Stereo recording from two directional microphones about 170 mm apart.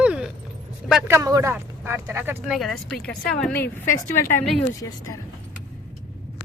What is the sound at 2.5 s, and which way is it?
Speech, centre (ahead or behind).